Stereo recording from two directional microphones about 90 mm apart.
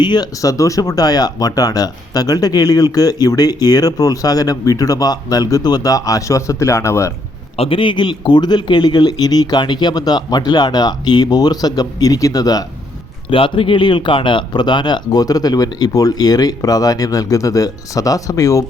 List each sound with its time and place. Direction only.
0.0 s speech: 50° left (ahead or behind); by 7.1 s 30° left (ahead or behind)
7.5 s speech: 85° left; by 12.6 s 45° left (ahead or behind)
13.3 s speech: 80° left; by 18.6 s 40° left (ahead or behind)